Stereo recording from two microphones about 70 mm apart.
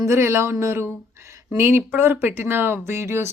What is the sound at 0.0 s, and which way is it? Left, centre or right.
Speech, right.